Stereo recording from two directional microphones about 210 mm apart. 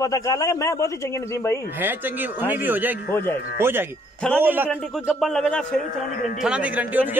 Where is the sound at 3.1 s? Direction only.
10° left (ahead or behind).